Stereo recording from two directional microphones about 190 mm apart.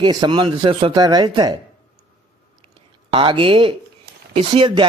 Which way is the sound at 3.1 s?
25° right (ahead or behind).